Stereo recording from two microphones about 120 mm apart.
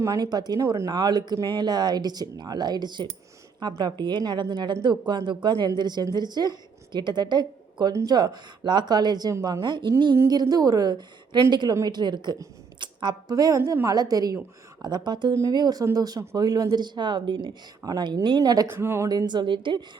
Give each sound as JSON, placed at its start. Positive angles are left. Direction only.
{"t": 0.0, "sound": "a woman's voice", "side_deg": -30}
{"t": 18.7, "sound": "a woman's voice", "side_deg": -20}